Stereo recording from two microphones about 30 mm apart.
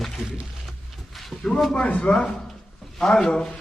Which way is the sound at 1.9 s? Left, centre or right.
Left.